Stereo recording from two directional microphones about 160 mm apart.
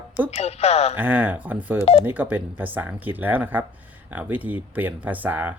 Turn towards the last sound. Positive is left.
turn(degrees=-10)  # may be behind; listen again after turning